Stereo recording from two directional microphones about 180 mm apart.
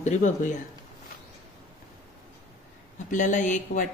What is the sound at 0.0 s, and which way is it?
Speech, 40° left (ahead or behind).